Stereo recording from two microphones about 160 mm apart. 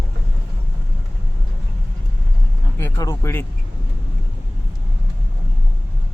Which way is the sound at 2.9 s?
25° left (ahead or behind).